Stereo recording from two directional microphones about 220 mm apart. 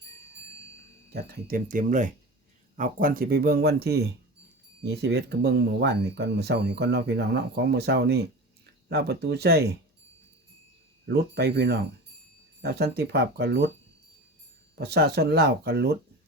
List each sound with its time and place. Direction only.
1.1 s speech: 45° right (ahead or behind)
11.1 s speech: 50° right (ahead or behind)
14.8 s speech: 45° right (ahead or behind)